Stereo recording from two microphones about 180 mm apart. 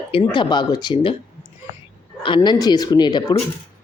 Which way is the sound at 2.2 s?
25° left (ahead or behind).